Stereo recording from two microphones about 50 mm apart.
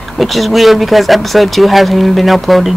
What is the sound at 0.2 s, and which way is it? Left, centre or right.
Speech, centre.